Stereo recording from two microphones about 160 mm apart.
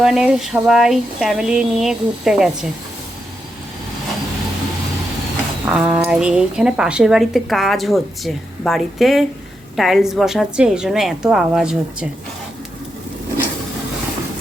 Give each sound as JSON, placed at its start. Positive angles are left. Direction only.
{"t": 0.0, "sound": "a woman's voice", "side_deg": -5}
{"t": 5.6, "sound": "a woman's voice", "side_deg": -10}